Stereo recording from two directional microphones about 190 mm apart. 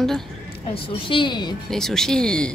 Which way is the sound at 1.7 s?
Centre (ahead or behind).